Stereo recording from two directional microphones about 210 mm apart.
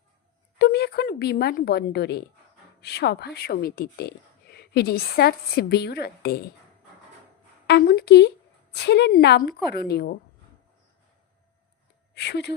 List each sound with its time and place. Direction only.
0.6 s a woman's voice: 50° left (ahead or behind)
7.7 s a woman's voice: 50° left (ahead or behind)
12.1 s speech: 50° left (ahead or behind)